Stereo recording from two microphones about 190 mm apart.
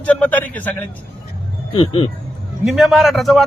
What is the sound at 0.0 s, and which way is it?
Speech, 5° left (ahead or behind).